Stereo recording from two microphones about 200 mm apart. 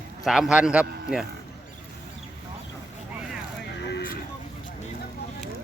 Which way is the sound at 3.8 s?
50° left (ahead or behind).